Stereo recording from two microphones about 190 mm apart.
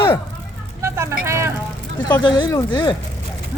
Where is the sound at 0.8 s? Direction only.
15° right (ahead or behind).